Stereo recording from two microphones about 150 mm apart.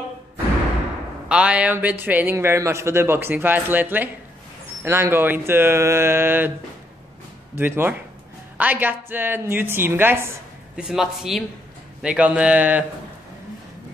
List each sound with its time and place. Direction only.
1.3 s a man's voice: 10° right (ahead or behind)
7.5 s a man's voice: 15° right (ahead or behind)
10.8 s a man's voice: 5° right (ahead or behind)